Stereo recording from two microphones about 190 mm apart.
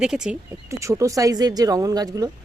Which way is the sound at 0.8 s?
15° right (ahead or behind).